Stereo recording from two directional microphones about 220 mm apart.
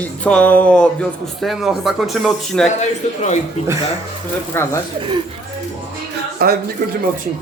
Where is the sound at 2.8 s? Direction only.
30° left (ahead or behind).